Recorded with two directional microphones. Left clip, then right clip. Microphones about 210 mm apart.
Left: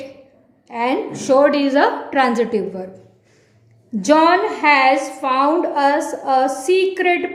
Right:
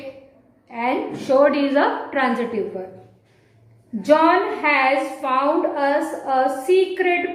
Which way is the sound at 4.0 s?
50° left (ahead or behind).